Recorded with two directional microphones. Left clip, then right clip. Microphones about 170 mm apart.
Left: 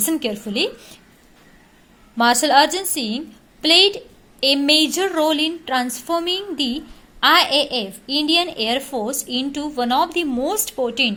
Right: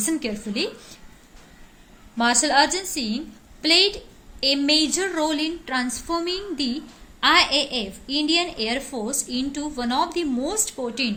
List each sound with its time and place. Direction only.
0.0 s a woman's voice: 30° left (ahead or behind)
2.1 s a woman's voice: 30° left (ahead or behind)